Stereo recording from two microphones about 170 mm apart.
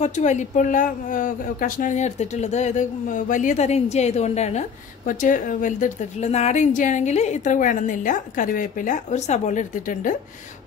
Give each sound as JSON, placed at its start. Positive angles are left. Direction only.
{"t": 0.0, "sound": "speech", "side_deg": 45}